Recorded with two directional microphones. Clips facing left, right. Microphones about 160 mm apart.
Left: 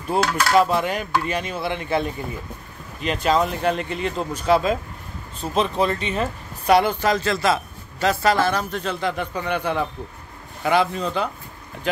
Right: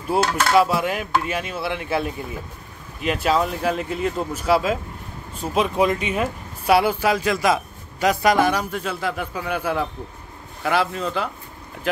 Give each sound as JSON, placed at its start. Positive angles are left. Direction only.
{"t": 0.2, "sound": "speech", "side_deg": -25}
{"t": 0.5, "sound": "speech", "side_deg": -5}